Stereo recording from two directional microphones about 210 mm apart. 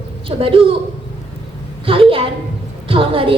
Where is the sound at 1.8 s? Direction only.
25° right (ahead or behind).